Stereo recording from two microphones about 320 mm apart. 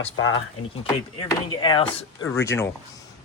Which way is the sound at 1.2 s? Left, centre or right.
Centre.